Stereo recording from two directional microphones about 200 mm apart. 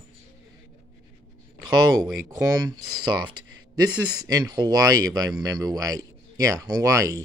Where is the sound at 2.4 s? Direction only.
20° right (ahead or behind).